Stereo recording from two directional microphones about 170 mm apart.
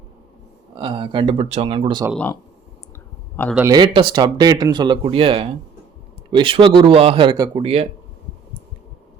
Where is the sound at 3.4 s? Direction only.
10° left (ahead or behind).